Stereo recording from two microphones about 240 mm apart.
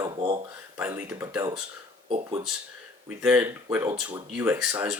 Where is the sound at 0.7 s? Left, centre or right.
Centre.